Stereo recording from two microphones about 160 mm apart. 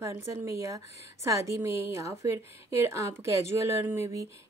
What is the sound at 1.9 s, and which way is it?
A woman's voice, 20° right (ahead or behind).